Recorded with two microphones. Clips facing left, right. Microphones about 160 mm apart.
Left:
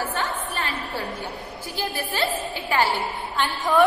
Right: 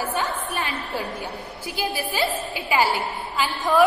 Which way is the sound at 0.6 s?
20° right (ahead or behind).